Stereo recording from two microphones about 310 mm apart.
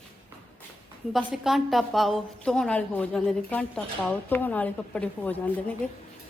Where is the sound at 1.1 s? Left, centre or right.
Centre.